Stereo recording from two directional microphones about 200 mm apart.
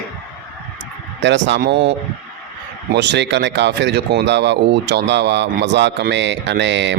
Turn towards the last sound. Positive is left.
turn(degrees=-60)  # may be behind; listen again after turning